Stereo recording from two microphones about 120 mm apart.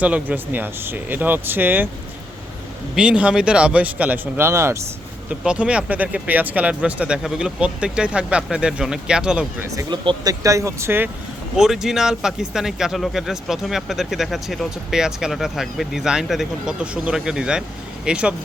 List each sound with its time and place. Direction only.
0.0 s speech: 15° right (ahead or behind)
2.9 s speech: 10° right (ahead or behind)
5.3 s speech: 10° right (ahead or behind)
9.9 s speech: 40° right (ahead or behind)
10.4 s speech: 25° right (ahead or behind)
11.5 s speech: 5° right (ahead or behind)